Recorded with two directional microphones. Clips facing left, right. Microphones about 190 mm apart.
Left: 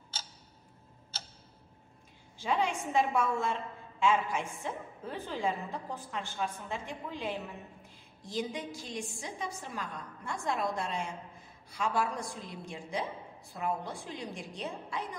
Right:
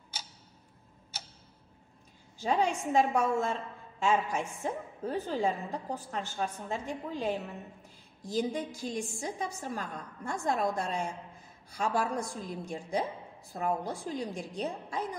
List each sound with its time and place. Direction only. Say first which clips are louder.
2.3 s a woman's voice: right 2 dB; 45° right (ahead or behind)